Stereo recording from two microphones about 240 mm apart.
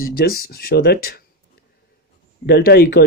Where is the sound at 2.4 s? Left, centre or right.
Left.